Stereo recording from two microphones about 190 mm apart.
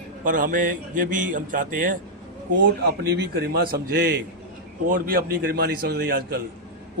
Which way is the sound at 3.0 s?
55° right (ahead or behind).